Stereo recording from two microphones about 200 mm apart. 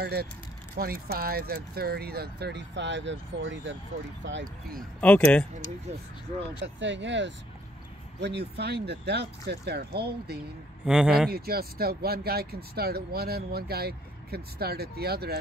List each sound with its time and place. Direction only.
0.0 s speech: 50° right (ahead or behind)
5.0 s speech: 5° left (ahead or behind)
6.6 s speech: 65° right (ahead or behind)
10.9 s speech: 5° right (ahead or behind)
11.3 s speech: 50° right (ahead or behind)